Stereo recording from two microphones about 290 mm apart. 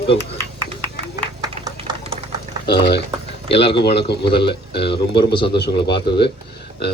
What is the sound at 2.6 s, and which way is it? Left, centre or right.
Speech, left.